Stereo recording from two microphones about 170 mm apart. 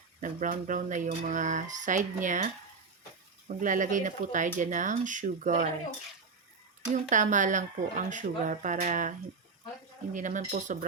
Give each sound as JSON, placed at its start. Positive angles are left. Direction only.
{"t": 0.2, "sound": "speech", "side_deg": -50}
{"t": 3.5, "sound": "speech", "side_deg": -50}
{"t": 7.1, "sound": "speech", "side_deg": -45}